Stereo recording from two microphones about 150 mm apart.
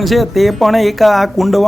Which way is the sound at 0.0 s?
Centre (ahead or behind).